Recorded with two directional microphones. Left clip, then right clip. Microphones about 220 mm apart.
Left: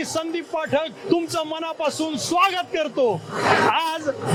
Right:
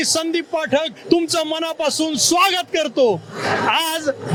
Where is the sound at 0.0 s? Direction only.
50° right (ahead or behind).